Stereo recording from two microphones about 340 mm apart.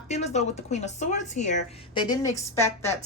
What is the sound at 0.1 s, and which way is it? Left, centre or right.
Speech, centre.